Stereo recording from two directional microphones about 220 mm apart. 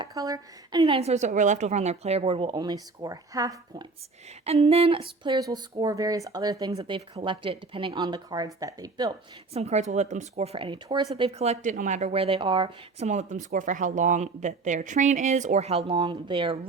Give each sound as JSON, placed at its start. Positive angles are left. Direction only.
{"t": 0.0, "sound": "a woman's voice", "side_deg": -15}
{"t": 4.4, "sound": "a woman's voice", "side_deg": -25}